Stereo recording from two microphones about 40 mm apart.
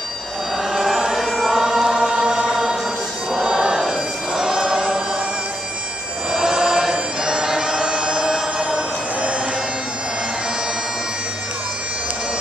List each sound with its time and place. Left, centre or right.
0.7 s a sound: centre
1.4 s choir: centre
2.5 s music: centre
3.3 s choir: centre
6.3 s bagpipes: centre